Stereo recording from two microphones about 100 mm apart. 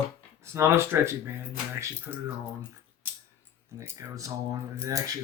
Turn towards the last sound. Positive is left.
turn(degrees=-35)  # may be behind; listen again after turning